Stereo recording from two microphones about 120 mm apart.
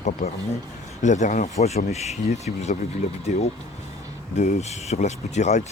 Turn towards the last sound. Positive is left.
turn(degrees=75)  # may be behind; listen again after turning